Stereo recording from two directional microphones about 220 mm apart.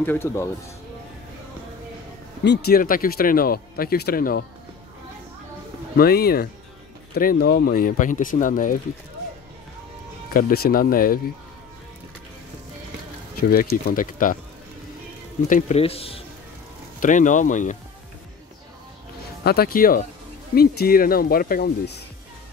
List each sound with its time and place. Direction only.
0.0 s speech: 10° left (ahead or behind)
2.4 s speech: 50° left (ahead or behind)
5.9 s speech: 45° left (ahead or behind)
10.3 s speech: 40° left (ahead or behind)
13.4 s speech: 45° left (ahead or behind)
15.4 s speech: 35° left (ahead or behind)
19.4 s speech: 45° left (ahead or behind)